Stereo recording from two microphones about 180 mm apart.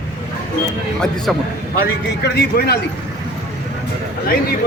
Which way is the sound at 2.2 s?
60° left (ahead or behind).